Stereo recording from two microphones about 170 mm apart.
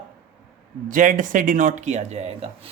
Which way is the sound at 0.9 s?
50° right (ahead or behind).